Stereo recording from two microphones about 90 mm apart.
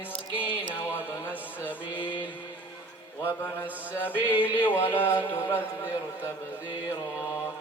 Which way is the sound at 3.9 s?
25° left (ahead or behind).